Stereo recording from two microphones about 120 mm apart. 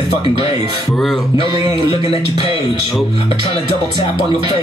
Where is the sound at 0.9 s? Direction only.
Centre (ahead or behind).